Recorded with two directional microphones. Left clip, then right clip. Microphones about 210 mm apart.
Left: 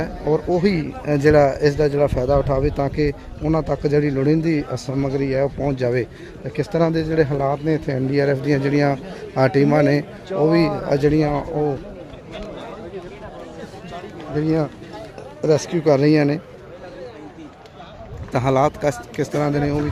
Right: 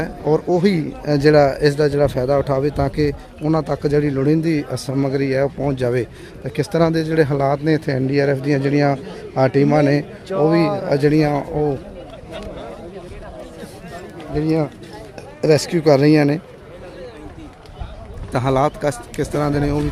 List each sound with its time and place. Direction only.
0.0 s speech: 20° right (ahead or behind)
10.6 s speech: 50° right (ahead or behind)
10.8 s speech: 10° right (ahead or behind)
14.3 s speech: centre (ahead or behind)
15.4 s a man's voice: 20° right (ahead or behind)
18.3 s speech: 5° right (ahead or behind)